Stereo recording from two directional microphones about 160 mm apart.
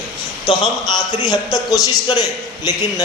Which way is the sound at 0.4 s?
30° left (ahead or behind).